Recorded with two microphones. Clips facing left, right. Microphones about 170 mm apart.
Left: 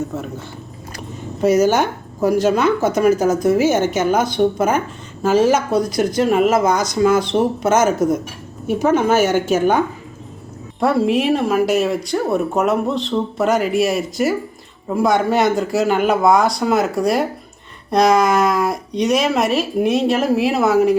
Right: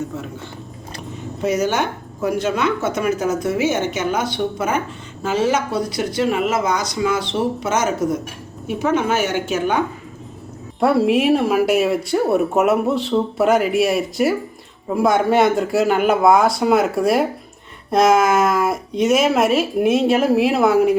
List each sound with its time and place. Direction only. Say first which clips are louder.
1.4 s speech: left 5 dB; 40° left (ahead or behind)
10.8 s a woman's voice: right 1 dB; centre (ahead or behind)